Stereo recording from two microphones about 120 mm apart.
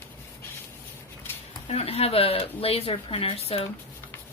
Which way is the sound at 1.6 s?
60° left (ahead or behind).